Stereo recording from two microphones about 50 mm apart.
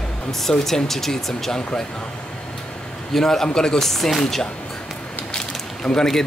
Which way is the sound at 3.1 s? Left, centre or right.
Centre.